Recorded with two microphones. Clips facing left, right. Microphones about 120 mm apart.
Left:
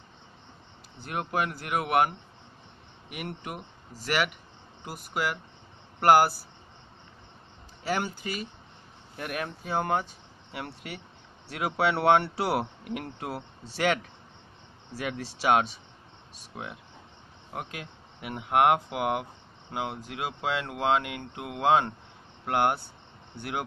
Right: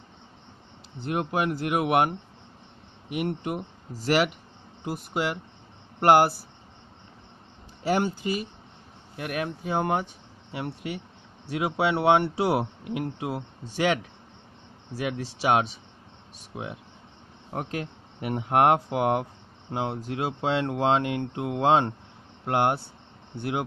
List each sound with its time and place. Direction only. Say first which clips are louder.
0.9 s speech: right 3 dB; 25° right (ahead or behind)
7.9 s speech: right 5 dB; 30° right (ahead or behind)
9.1 s speech: right 3 dB; 15° right (ahead or behind)
15.0 s speech: right 3 dB; 20° right (ahead or behind)
17.5 s speech: right 6 dB; 35° right (ahead or behind)